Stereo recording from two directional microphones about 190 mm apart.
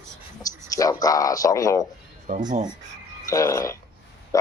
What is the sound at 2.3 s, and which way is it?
Speech, 40° right (ahead or behind).